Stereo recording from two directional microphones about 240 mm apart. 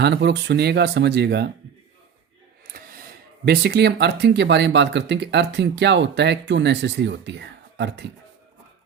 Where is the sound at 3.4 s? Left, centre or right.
Right.